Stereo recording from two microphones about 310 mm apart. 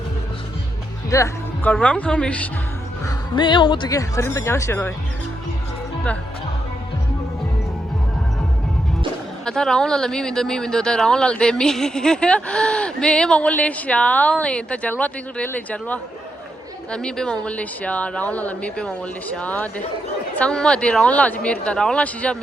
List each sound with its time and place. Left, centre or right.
1.1 s speech: centre
3.3 s speech: centre
9.5 s speech: centre